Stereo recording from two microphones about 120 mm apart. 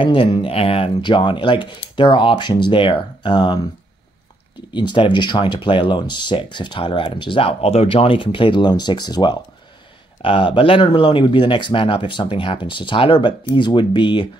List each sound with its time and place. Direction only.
0.0 s speech: 45° left (ahead or behind)
4.7 s speech: 40° left (ahead or behind)